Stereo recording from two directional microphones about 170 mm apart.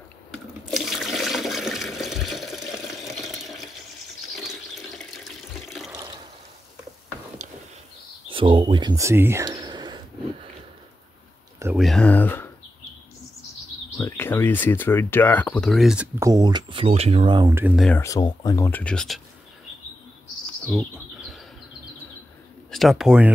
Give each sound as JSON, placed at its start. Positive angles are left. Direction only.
{"t": 0.7, "sound": "toilet flush", "side_deg": 0}
{"t": 4.4, "sound": "water tap", "side_deg": 0}
{"t": 8.3, "sound": "speech", "side_deg": -30}
{"t": 11.7, "sound": "speech", "side_deg": 0}
{"t": 13.9, "sound": "speech", "side_deg": 15}
{"t": 16.2, "sound": "speech", "side_deg": -20}
{"t": 17.7, "sound": "speech", "side_deg": 5}
{"t": 18.0, "sound": "speech", "side_deg": 20}
{"t": 22.7, "sound": "speech", "side_deg": 0}